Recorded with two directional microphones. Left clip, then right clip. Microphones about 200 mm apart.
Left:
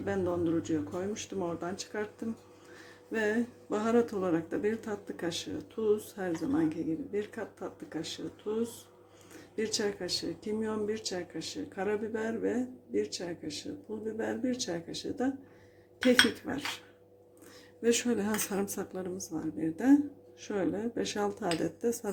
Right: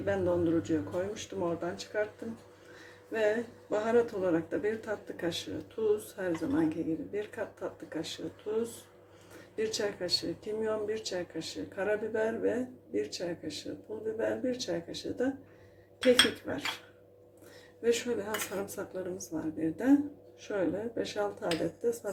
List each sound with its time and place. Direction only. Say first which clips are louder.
0.0 s speech: right 2 dB; 20° left (ahead or behind)
3.1 s speech: right 2 dB; 30° left (ahead or behind)
9.6 s speech: even; 25° left (ahead or behind)
17.8 s speech: left 1 dB; 35° left (ahead or behind)